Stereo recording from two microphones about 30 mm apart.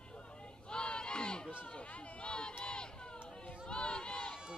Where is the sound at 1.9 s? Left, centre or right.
Left.